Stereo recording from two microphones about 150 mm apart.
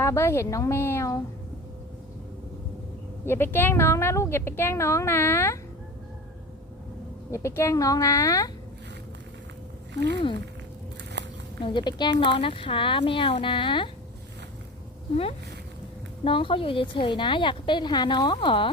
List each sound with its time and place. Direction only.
0.0 s a woman's voice: 20° left (ahead or behind)
3.2 s a woman's voice: 15° left (ahead or behind)
7.3 s speech: 20° left (ahead or behind)
11.6 s a woman's voice: 30° left (ahead or behind)
15.1 s a woman's voice: 45° left (ahead or behind)